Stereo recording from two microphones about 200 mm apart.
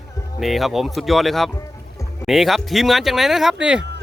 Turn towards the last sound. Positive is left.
turn(degrees=-5)  # may be behind; listen again after turning